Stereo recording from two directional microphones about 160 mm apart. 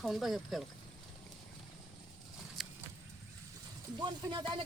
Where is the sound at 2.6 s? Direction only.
Centre (ahead or behind).